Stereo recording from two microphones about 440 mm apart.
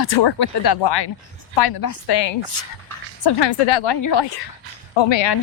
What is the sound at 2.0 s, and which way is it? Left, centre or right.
Speech, left.